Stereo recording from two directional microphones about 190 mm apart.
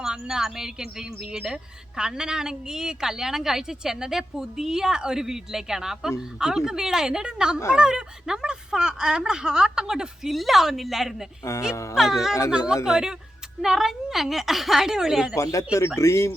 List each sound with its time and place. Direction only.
0.0 s a woman's voice: 5° right (ahead or behind)
11.7 s speech: 15° left (ahead or behind)
11.9 s a woman's voice: centre (ahead or behind)
15.5 s speech: 15° left (ahead or behind)